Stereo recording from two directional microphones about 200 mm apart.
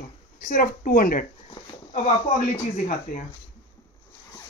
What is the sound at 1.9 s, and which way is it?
Speech, 25° left (ahead or behind).